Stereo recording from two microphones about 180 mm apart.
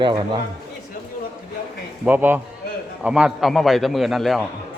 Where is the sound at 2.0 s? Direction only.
10° right (ahead or behind).